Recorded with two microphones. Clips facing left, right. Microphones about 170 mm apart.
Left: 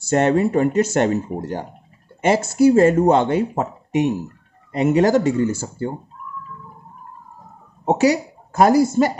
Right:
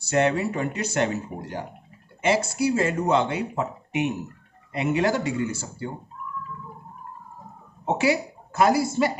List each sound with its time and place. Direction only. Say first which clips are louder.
0.1 s speech: left 6 dB; 45° left (ahead or behind)
7.8 s a woman's voice: left 6 dB; 40° left (ahead or behind)